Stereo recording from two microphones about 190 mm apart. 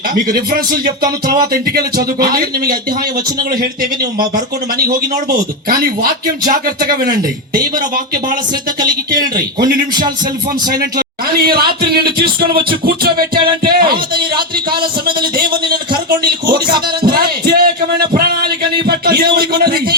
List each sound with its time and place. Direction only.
0.3 s a man's voice: 50° right (ahead or behind)
5.6 s a man's voice: 50° right (ahead or behind)
8.8 s music: 20° right (ahead or behind)
10.9 s a man's voice: 50° right (ahead or behind)
15.4 s a man's voice: 50° right (ahead or behind)
16.5 s music: 25° right (ahead or behind)
17.2 s a man's voice: 55° right (ahead or behind)